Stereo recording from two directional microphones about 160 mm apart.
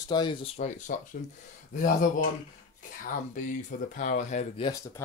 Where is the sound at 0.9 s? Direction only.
60° left (ahead or behind).